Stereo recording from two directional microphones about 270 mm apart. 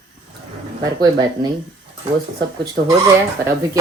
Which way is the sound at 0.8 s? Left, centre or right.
Centre.